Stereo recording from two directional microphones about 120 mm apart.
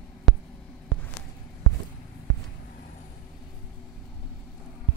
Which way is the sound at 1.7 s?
25° left (ahead or behind).